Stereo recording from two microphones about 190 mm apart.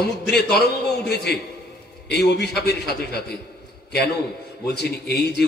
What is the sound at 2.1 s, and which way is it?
A man's voice, 60° left (ahead or behind).